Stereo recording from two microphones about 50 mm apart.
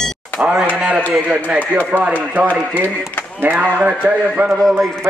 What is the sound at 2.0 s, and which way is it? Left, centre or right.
Speech, right.